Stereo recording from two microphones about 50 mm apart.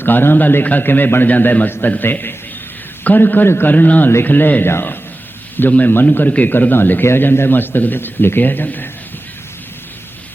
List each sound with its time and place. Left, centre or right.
0.0 s a man's voice: left
6.1 s a man's voice: left
7.0 s a man's voice: left